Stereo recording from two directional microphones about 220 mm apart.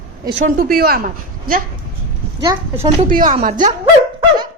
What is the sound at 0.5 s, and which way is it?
Speech, 45° right (ahead or behind).